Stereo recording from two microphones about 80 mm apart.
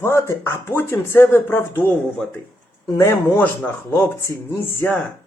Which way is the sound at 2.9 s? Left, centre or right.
Left.